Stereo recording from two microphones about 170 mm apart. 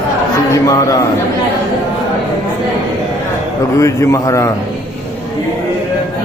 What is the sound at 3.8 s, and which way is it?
Speech, 20° left (ahead or behind).